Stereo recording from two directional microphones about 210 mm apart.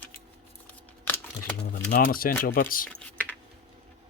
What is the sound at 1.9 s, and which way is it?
Speech, 40° left (ahead or behind).